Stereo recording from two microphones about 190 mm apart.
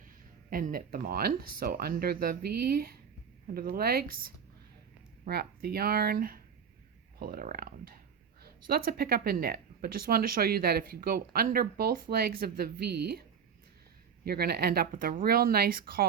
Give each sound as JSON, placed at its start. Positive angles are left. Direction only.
{"t": 0.5, "sound": "speech", "side_deg": -50}
{"t": 14.3, "sound": "speech", "side_deg": -55}